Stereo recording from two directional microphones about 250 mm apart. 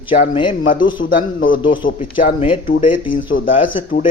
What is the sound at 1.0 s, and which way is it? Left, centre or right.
Speech, left.